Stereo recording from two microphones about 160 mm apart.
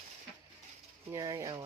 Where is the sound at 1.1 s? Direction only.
20° right (ahead or behind).